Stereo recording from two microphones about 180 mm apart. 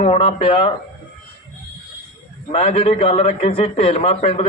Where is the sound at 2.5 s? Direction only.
35° left (ahead or behind).